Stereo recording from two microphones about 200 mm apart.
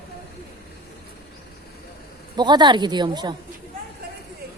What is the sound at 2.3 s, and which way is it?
Speech, 20° right (ahead or behind).